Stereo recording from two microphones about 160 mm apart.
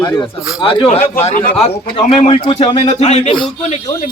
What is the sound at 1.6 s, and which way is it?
Speech, 35° left (ahead or behind).